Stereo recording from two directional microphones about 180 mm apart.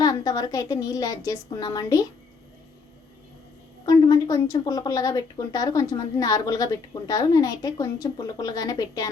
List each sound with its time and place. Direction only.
0.0 s a woman's voice: 20° left (ahead or behind)
3.8 s a woman's voice: 20° left (ahead or behind)